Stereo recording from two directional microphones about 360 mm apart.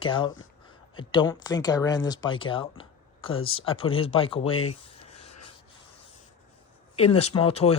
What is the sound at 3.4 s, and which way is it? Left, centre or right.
Speech, left.